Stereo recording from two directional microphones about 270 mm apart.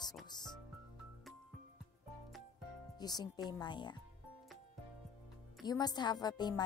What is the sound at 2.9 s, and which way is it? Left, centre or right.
A woman's voice, centre.